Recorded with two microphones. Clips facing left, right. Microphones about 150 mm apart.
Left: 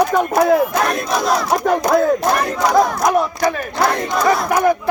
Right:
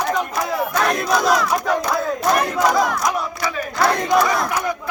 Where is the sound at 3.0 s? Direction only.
45° left (ahead or behind).